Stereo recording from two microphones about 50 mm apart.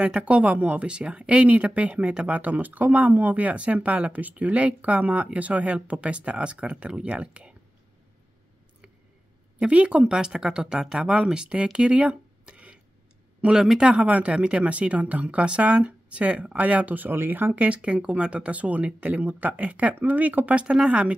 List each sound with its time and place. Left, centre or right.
0.0 s speech: right
9.7 s speech: right
13.8 s speech: right
17.6 s speech: right